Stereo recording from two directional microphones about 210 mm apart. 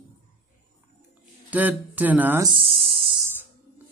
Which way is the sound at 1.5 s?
5° right (ahead or behind).